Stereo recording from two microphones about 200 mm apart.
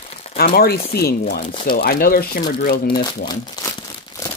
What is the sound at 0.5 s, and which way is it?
Speech, 50° left (ahead or behind).